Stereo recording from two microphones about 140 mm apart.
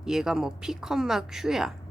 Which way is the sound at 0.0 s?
5° right (ahead or behind).